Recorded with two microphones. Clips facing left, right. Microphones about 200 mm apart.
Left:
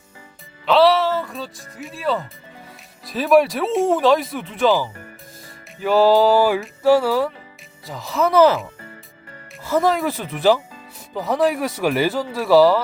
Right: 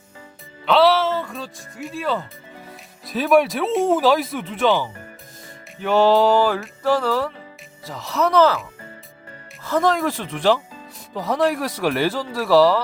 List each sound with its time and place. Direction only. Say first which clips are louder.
0.6 s speech: left 1 dB; centre (ahead or behind)
9.6 s speech: left 1 dB; 5° left (ahead or behind)